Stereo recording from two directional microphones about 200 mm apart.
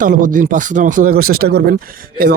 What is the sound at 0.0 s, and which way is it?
Speech, 40° right (ahead or behind).